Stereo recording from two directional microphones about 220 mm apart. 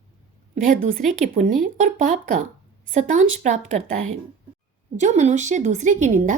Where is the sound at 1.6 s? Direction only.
35° right (ahead or behind).